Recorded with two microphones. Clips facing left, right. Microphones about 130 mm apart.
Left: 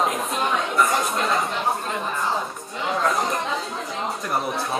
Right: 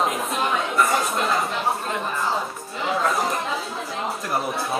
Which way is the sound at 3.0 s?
5° right (ahead or behind).